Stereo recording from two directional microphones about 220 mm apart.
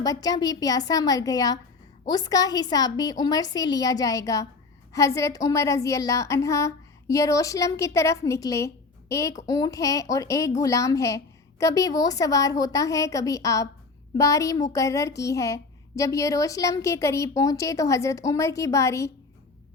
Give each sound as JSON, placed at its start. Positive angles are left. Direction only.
{"t": 0.0, "sound": "a woman's voice", "side_deg": 15}